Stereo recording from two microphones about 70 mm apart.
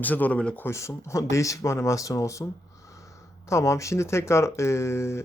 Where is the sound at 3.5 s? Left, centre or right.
Left.